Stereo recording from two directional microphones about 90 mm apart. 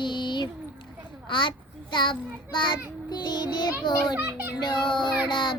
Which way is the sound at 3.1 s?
55° left (ahead or behind).